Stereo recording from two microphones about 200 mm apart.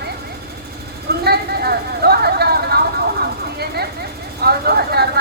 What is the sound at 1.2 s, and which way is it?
Vehicle, 50° right (ahead or behind).